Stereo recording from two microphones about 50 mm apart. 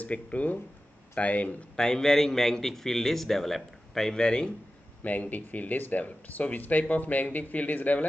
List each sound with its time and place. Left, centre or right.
0.0 s speech: left
1.8 s a man's voice: centre
5.0 s speech: left